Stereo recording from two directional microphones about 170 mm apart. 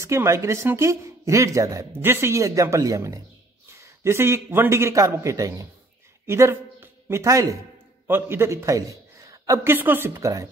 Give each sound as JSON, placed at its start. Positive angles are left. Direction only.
{"t": 0.0, "sound": "a man's voice", "side_deg": -15}